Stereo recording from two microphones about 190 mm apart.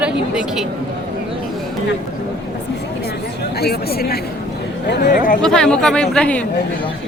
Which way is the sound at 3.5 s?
55° left (ahead or behind).